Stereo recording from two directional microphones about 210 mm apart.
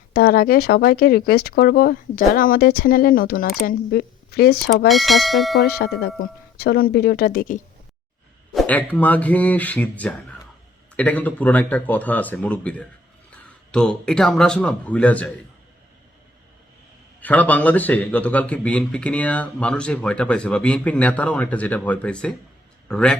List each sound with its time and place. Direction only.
0.1 s speech: 45° left (ahead or behind)
4.9 s speech: centre (ahead or behind)
5.6 s speech: 50° left (ahead or behind)
8.5 s a man's voice: 5° left (ahead or behind)
17.2 s a man's voice: 10° left (ahead or behind)